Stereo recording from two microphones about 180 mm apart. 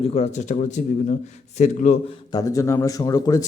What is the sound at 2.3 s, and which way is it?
Speech, 20° left (ahead or behind).